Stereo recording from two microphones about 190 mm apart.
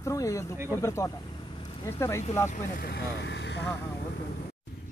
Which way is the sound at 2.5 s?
45° left (ahead or behind).